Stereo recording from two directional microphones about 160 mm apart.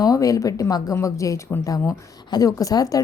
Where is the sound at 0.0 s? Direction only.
20° left (ahead or behind).